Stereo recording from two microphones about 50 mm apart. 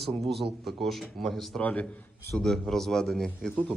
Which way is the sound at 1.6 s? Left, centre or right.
Left.